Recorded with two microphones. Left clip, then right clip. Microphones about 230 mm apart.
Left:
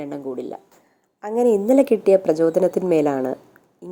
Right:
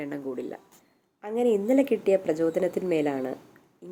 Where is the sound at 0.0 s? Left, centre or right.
Centre.